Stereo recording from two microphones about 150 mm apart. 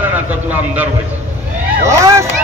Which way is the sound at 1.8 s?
20° right (ahead or behind).